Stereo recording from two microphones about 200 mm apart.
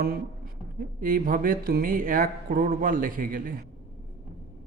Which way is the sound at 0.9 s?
45° right (ahead or behind).